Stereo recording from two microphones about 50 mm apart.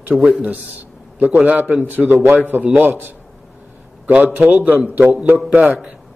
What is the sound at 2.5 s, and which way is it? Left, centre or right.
Speech, right.